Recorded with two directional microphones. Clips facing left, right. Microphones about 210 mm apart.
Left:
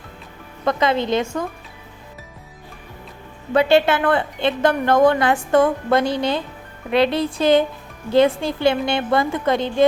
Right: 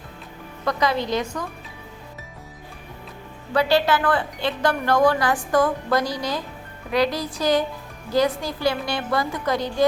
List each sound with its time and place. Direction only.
0.6 s a woman's voice: 25° left (ahead or behind)
3.5 s a woman's voice: 25° left (ahead or behind)